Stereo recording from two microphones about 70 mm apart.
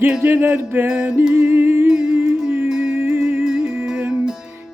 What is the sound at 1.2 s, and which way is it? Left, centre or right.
Music, centre.